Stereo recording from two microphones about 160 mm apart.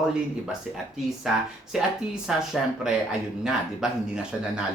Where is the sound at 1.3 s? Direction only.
5° right (ahead or behind).